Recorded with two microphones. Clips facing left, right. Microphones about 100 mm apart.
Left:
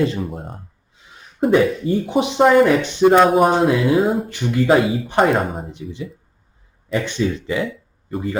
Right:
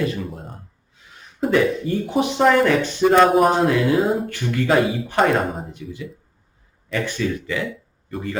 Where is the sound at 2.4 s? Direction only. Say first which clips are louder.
Left 3 dB; 5° left (ahead or behind).